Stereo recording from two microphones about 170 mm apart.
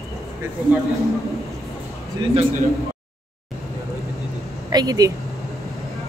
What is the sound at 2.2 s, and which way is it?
Speech, 25° right (ahead or behind).